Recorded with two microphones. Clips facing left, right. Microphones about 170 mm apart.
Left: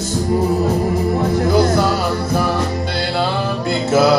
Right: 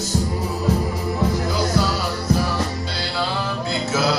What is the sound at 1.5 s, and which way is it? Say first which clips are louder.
Music: left 9 dB; 55° left (ahead or behind).